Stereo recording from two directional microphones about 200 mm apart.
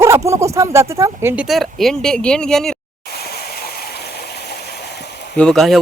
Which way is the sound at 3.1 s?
50° left (ahead or behind).